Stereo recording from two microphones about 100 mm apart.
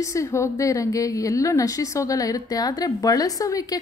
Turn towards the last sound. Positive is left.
turn(degrees=35)  # may be behind; listen again after turning